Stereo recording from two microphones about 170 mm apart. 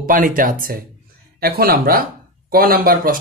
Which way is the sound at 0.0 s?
55° right (ahead or behind).